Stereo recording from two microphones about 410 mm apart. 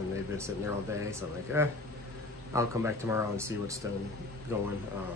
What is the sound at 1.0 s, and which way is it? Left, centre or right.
Speech, centre.